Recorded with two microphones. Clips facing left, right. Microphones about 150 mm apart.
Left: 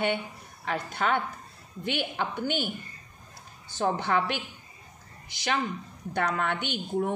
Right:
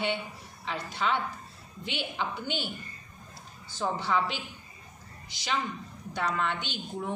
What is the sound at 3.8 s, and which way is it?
Speech, 60° left (ahead or behind).